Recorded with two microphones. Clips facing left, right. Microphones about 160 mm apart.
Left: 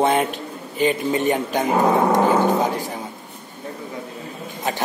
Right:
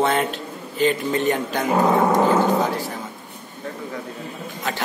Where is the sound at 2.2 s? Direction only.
15° left (ahead or behind).